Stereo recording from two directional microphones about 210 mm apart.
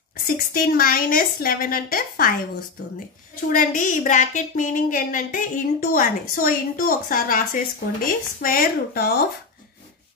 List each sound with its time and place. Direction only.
0.5 s a woman's voice: 45° left (ahead or behind)
3.4 s a woman's voice: 40° left (ahead or behind)